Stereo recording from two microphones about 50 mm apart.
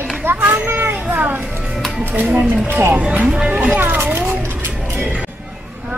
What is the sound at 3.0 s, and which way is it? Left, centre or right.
Speech, right.